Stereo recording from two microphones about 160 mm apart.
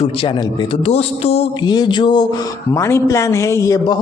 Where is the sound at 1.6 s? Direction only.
25° left (ahead or behind).